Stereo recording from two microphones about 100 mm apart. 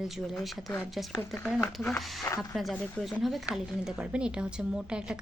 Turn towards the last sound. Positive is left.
turn(degrees=-5)  # may be behind; listen again after turning